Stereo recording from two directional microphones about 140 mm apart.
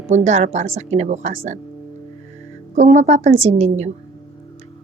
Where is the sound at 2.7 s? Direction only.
55° right (ahead or behind).